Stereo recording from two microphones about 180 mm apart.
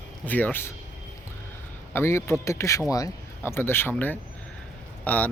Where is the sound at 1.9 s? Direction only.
15° left (ahead or behind).